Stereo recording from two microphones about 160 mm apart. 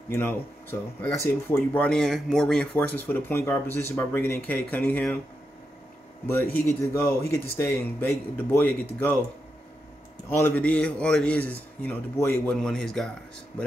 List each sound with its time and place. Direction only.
0.1 s speech: 15° left (ahead or behind)
6.2 s speech: 15° left (ahead or behind)
10.3 s speech: 10° left (ahead or behind)